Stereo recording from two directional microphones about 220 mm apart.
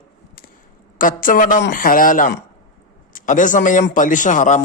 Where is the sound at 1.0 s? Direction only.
40° left (ahead or behind).